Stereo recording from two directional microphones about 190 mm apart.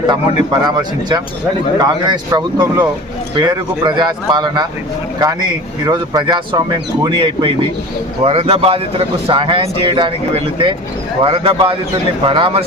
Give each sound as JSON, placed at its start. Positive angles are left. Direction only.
{"t": 0.6, "sound": "speech", "side_deg": -20}